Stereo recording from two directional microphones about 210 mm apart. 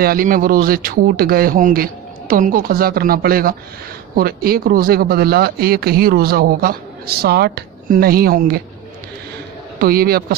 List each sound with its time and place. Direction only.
0.0 s speech: 45° right (ahead or behind)
9.8 s speech: 45° right (ahead or behind)